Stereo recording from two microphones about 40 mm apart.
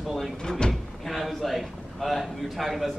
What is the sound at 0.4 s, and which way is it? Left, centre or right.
Door, centre.